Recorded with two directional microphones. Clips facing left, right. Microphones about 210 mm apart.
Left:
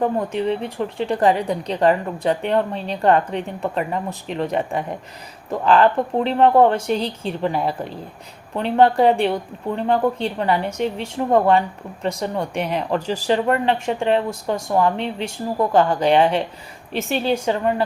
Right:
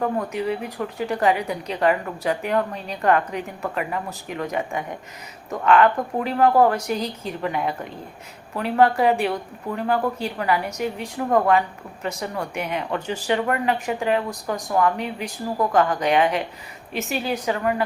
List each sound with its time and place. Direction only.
0.0 s speech: 30° left (ahead or behind)